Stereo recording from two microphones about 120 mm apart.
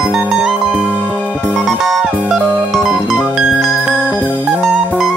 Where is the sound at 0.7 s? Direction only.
15° left (ahead or behind).